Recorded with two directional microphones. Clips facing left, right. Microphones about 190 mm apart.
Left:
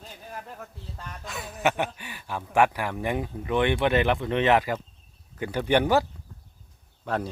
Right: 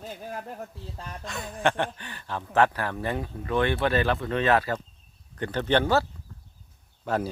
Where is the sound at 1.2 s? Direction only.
Centre (ahead or behind).